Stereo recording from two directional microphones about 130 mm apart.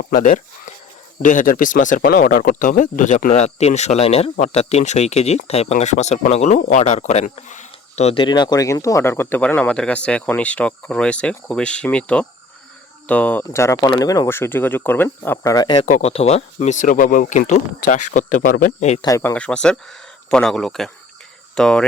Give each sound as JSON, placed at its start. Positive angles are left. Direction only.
{"t": 0.1, "sound": "speech", "side_deg": 80}
{"t": 15.5, "sound": "speech", "side_deg": 35}
{"t": 15.9, "sound": "speech", "side_deg": 55}
{"t": 16.6, "sound": "speech", "side_deg": 70}
{"t": 19.0, "sound": "speech", "side_deg": 20}